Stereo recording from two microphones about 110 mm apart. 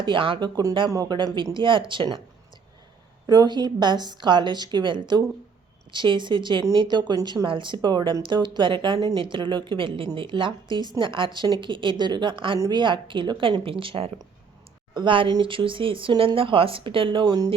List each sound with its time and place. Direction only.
0.0 s a woman's voice: 50° right (ahead or behind)
3.2 s a woman's voice: 40° right (ahead or behind)
7.4 s speech: 50° right (ahead or behind)
9.0 s speech: 60° right (ahead or behind); by 17.5 s 35° right (ahead or behind)